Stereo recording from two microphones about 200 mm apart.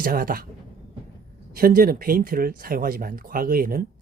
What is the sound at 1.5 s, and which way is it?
Speech, 45° right (ahead or behind).